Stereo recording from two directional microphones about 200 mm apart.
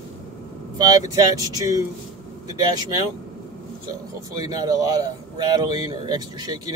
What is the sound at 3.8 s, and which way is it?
A man's voice, 20° right (ahead or behind).